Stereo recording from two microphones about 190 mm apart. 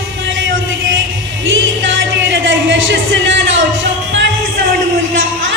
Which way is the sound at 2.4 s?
80° right.